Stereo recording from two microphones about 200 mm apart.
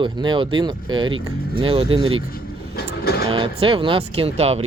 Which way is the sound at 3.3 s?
25° right (ahead or behind).